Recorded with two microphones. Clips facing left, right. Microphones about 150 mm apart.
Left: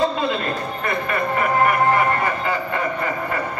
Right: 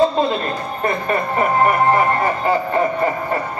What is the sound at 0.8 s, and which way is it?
Music, 35° right (ahead or behind).